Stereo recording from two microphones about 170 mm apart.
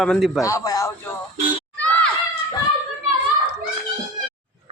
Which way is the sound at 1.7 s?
5° left (ahead or behind).